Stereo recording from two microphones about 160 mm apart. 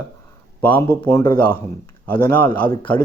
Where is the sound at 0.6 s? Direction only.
10° left (ahead or behind).